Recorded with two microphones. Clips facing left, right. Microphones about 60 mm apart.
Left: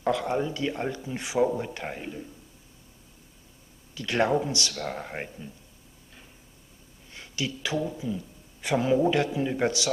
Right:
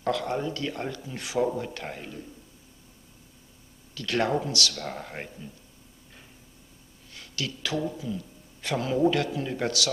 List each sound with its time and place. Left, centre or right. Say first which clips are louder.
0.0 s speech: left 2 dB; centre
3.9 s speech: left 2 dB; centre
7.1 s a man's voice: left 2 dB; left